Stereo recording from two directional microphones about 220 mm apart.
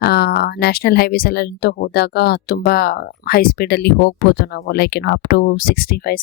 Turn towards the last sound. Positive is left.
turn(degrees=40)  # may be behind; listen again after turning